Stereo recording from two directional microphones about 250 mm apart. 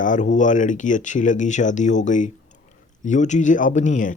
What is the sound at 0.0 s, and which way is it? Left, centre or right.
Speech, left.